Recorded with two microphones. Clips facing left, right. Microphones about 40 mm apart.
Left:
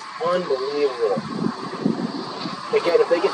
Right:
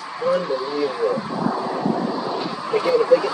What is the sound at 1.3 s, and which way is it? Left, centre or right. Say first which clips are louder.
Vehicle: right 4 dB; centre.